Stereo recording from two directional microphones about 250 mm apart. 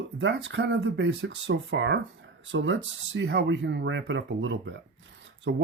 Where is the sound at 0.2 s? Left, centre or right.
Right.